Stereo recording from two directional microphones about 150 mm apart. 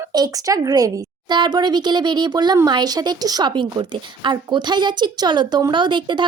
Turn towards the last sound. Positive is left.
turn(degrees=-30)  # may be behind; listen again after turning